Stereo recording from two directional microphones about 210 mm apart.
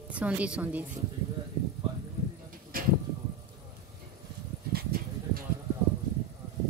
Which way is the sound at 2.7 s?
40° right (ahead or behind).